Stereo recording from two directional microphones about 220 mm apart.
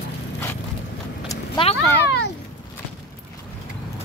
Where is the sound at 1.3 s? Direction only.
25° left (ahead or behind).